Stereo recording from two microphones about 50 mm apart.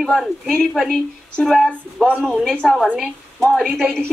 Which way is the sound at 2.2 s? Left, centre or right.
Centre.